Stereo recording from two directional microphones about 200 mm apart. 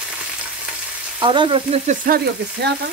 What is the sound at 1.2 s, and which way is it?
Frying, 25° right (ahead or behind).